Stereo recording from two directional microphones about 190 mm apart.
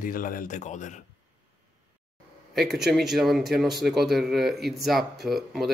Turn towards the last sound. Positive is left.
turn(degrees=0)  # may be behind; listen again after turning